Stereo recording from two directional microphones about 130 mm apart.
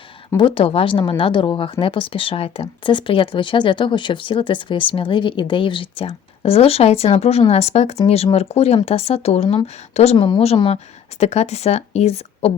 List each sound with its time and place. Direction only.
0.3 s speech: 40° left (ahead or behind)
11.2 s speech: 60° left (ahead or behind)